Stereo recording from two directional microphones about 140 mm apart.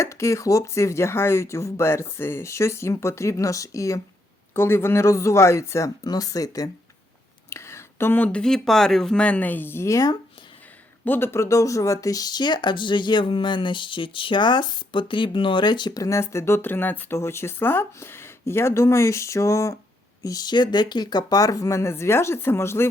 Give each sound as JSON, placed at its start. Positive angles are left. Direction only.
{"t": 0.0, "sound": "speech", "side_deg": 20}